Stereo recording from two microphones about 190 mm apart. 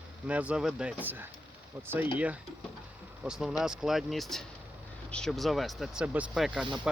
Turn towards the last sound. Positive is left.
turn(degrees=-5)  # may be behind; listen again after turning